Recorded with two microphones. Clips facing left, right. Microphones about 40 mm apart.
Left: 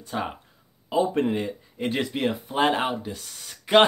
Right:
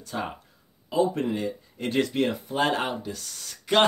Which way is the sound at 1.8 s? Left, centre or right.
Centre.